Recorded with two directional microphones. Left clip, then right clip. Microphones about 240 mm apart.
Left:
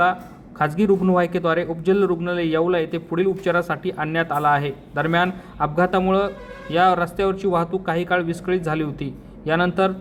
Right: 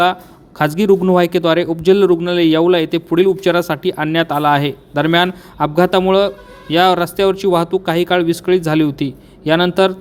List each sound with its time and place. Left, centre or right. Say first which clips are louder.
0.6 s speech: right 6 dB; right